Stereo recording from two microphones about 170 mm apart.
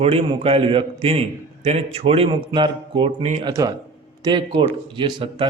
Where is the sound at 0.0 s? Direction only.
35° right (ahead or behind).